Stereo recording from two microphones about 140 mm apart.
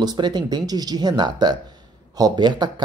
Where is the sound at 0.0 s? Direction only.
30° right (ahead or behind).